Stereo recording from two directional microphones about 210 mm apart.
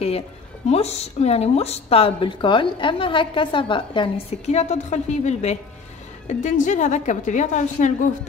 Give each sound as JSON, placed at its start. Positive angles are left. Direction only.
{"t": 0.7, "sound": "a woman's voice", "side_deg": 30}